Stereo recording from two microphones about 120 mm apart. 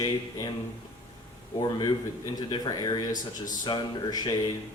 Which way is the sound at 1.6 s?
35° left (ahead or behind).